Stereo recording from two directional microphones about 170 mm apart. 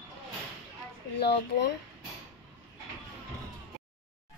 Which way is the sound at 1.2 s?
85° left.